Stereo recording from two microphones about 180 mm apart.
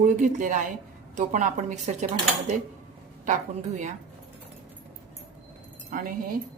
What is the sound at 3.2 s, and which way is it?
Speech, 40° right (ahead or behind).